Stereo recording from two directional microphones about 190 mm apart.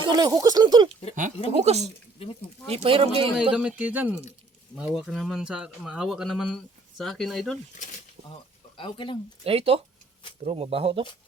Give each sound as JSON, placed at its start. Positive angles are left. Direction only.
{"t": 0.0, "sound": "speech", "side_deg": -20}
{"t": 1.5, "sound": "speech", "side_deg": -35}
{"t": 1.8, "sound": "speech", "side_deg": 30}
{"t": 2.6, "sound": "speech", "side_deg": -30}
{"t": 3.5, "sound": "speech", "side_deg": -5}
{"t": 8.7, "sound": "speech", "side_deg": 25}
{"t": 9.4, "sound": "speech", "side_deg": -30}